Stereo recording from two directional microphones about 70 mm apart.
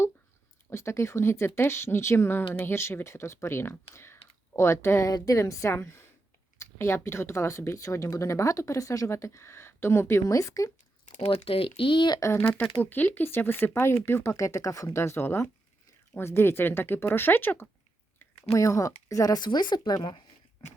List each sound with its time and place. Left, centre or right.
0.7 s speech: left
5.7 s speech: left
10.2 s speech: left
12.2 s speech: left
14.9 s speech: left
18.5 s speech: left
19.3 s speech: left